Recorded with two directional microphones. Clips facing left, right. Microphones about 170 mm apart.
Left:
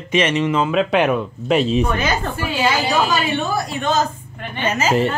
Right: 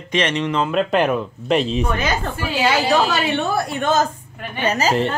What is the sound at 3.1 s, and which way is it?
Speech, 65° right (ahead or behind).